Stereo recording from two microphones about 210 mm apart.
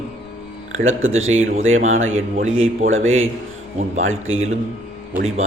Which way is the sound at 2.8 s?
70° right (ahead or behind).